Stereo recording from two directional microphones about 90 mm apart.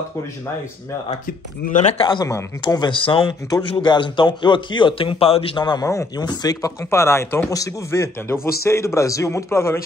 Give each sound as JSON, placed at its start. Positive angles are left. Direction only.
{"t": 2.0, "sound": "speech", "side_deg": 55}
{"t": 3.0, "sound": "speech", "side_deg": 70}
{"t": 3.8, "sound": "speech", "side_deg": 60}
{"t": 5.6, "sound": "speech", "side_deg": 55}
{"t": 5.9, "sound": "a man's voice", "side_deg": 35}